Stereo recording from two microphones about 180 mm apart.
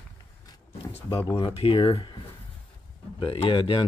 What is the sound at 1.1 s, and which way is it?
Speech, 25° left (ahead or behind).